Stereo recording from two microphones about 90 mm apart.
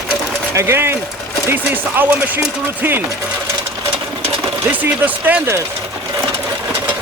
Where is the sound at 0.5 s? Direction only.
30° right (ahead or behind).